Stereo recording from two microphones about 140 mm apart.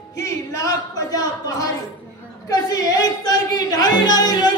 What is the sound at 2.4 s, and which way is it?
Music, 25° left (ahead or behind).